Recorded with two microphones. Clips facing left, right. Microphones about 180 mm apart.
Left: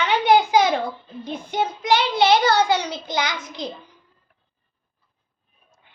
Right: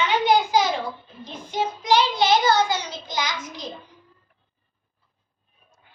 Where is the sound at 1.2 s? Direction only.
60° left (ahead or behind).